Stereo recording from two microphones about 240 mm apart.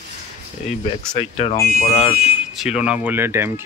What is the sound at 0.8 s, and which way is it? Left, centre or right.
Speech, left.